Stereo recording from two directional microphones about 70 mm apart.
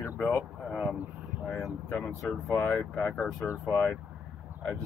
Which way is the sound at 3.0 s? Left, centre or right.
Centre.